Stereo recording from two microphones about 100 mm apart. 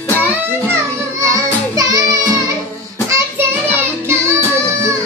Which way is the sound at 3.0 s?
30° right (ahead or behind).